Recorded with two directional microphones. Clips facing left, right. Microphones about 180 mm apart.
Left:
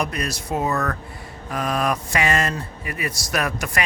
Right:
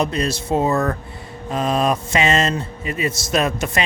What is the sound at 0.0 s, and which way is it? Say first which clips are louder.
Speech: right 5 dB; 25° right (ahead or behind).